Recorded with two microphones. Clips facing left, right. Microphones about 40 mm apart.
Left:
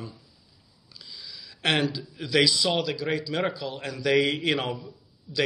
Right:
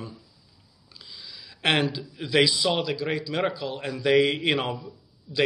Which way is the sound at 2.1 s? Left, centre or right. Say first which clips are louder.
Right 1 dB; centre.